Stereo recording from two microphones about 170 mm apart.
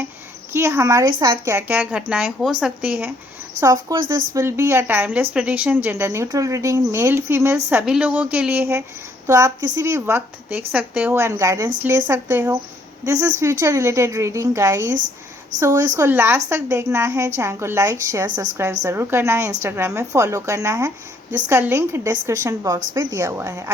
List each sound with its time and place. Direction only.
0.5 s a woman's voice: 15° right (ahead or behind)
3.6 s a woman's voice: 20° right (ahead or behind)